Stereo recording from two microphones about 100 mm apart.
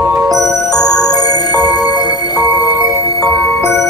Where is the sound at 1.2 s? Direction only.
40° left (ahead or behind).